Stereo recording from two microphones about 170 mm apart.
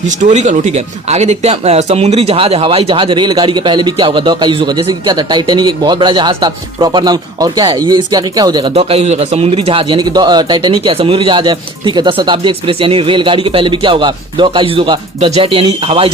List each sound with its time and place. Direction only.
0.1 s speech: 45° right (ahead or behind); by 8.7 s 25° right (ahead or behind)
8.7 s speech: 40° right (ahead or behind)